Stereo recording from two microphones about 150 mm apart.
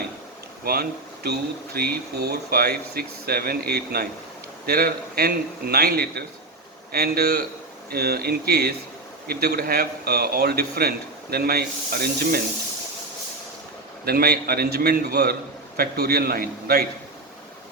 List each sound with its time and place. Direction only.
0.6 s speech: 90° right
14.0 s speech: 90° right